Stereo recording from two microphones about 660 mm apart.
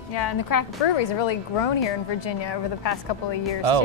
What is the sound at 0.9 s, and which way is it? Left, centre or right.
A woman's voice, left.